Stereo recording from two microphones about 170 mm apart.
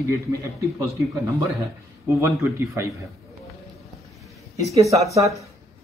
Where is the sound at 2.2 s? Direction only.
15° right (ahead or behind).